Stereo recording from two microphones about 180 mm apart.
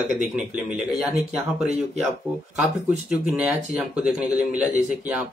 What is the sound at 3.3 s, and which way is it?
Speech, 5° right (ahead or behind).